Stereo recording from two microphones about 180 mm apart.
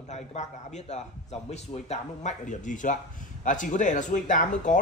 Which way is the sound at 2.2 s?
45° left (ahead or behind).